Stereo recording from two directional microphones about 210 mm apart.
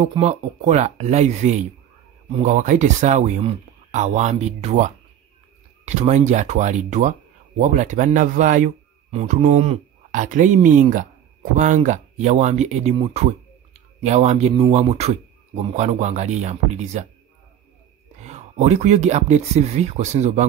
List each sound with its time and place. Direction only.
0.0 s speech: 30° right (ahead or behind)
18.2 s speech: 35° right (ahead or behind)